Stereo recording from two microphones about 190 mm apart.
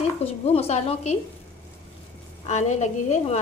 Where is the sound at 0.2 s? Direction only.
30° left (ahead or behind).